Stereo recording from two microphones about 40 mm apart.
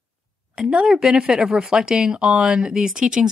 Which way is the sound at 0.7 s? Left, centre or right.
Centre.